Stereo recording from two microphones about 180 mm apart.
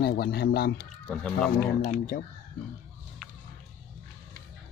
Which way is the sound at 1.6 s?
50° left (ahead or behind).